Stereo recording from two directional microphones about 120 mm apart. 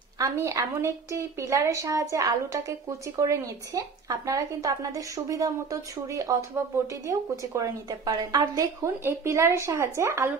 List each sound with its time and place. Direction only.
0.2 s a woman's voice: 30° right (ahead or behind)